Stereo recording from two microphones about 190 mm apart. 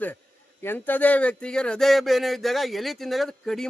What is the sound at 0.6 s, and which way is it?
Speech, 10° left (ahead or behind).